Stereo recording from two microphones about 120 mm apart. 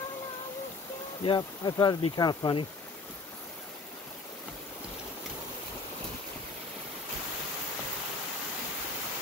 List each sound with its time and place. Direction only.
1.2 s speech: 35° left (ahead or behind)